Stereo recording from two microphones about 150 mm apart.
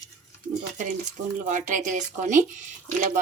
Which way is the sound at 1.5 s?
60° right (ahead or behind).